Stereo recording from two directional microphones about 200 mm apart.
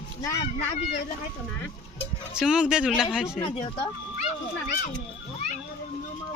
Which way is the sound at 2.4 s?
5° right (ahead or behind).